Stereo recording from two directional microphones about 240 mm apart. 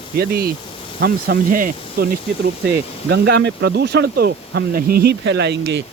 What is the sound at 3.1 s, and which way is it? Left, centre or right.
Speech, right.